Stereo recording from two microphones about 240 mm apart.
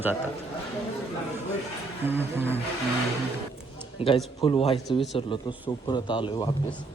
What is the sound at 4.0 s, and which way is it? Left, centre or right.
Speech, left.